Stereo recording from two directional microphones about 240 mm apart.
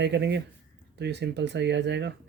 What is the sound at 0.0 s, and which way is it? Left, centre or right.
Speech, right.